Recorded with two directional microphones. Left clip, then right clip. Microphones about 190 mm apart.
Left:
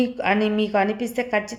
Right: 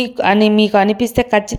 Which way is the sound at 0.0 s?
40° right (ahead or behind).